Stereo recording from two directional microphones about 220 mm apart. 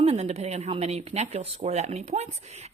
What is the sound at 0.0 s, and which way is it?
A woman's voice, 30° right (ahead or behind).